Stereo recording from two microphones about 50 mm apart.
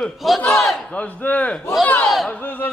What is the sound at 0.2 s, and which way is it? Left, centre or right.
Speech, centre.